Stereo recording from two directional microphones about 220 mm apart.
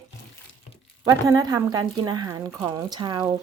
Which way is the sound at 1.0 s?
15° right (ahead or behind).